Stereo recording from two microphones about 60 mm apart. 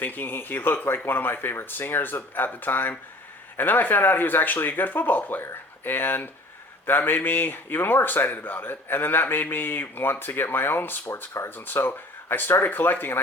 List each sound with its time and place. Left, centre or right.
0.0 s speech: left